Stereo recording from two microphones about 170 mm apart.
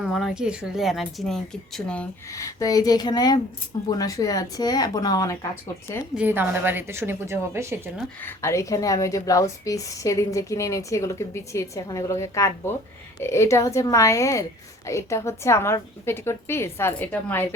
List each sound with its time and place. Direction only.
0.0 s speech: centre (ahead or behind)
2.3 s a woman's voice: 20° left (ahead or behind)
6.1 s a woman's voice: 10° right (ahead or behind)
7.9 s a woman's voice: 10° left (ahead or behind)